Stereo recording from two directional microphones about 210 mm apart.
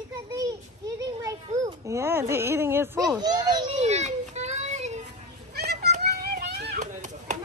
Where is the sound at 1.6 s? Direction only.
15° right (ahead or behind).